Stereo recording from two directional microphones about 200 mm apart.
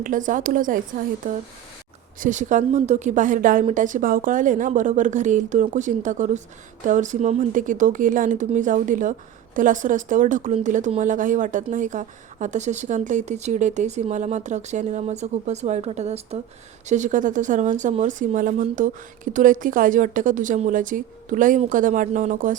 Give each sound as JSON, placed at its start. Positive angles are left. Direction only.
{"t": 0.0, "sound": "speech", "side_deg": -40}